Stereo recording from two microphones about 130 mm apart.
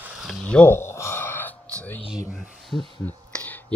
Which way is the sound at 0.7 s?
20° left (ahead or behind).